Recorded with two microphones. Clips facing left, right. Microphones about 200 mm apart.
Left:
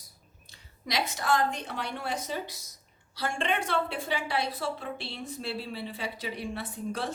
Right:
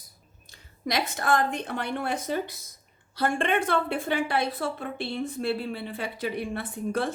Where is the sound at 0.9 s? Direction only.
55° right (ahead or behind).